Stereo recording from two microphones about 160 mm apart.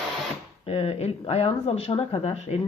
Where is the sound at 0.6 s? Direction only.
40° left (ahead or behind).